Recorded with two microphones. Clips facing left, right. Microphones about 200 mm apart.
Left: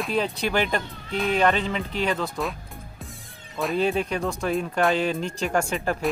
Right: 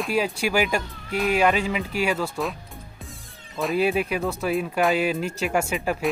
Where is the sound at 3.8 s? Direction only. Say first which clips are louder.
Right 1 dB; 10° right (ahead or behind).